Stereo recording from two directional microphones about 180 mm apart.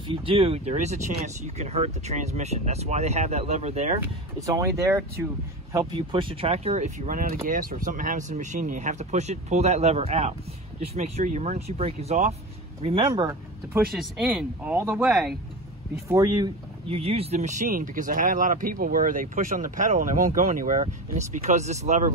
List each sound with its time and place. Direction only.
0.1 s speech: 30° right (ahead or behind)
4.0 s speech: 15° right (ahead or behind)
5.9 s speech: 30° right (ahead or behind)
13.9 s speech: centre (ahead or behind)
16.1 s speech: 20° right (ahead or behind)
16.9 s speech: 35° right (ahead or behind)